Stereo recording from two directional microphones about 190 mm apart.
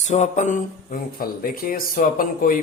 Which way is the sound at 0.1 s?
40° left (ahead or behind).